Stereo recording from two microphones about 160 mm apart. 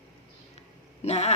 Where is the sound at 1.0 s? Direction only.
40° left (ahead or behind).